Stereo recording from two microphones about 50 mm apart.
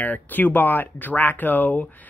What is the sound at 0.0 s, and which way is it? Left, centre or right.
Speech, left.